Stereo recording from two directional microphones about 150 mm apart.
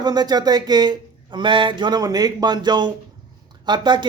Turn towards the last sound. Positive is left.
turn(degrees=-30)  # may be behind; listen again after turning